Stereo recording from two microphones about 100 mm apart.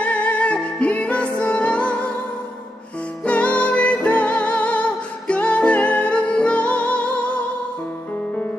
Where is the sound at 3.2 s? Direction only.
15° left (ahead or behind).